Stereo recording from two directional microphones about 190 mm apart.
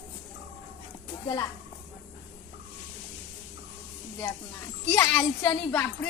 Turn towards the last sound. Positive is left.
turn(degrees=5)  # may be behind; listen again after turning